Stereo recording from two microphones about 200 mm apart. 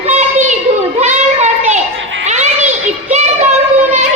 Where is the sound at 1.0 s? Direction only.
35° right (ahead or behind).